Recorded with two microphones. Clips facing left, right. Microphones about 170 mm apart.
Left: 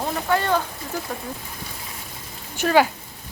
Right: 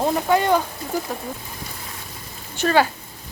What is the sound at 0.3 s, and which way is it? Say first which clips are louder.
Speech: right 2 dB; 15° right (ahead or behind).